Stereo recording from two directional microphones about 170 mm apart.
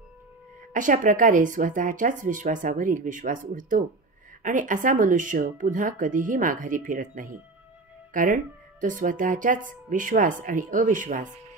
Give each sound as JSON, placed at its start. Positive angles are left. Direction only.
{"t": 0.7, "sound": "speech", "side_deg": -50}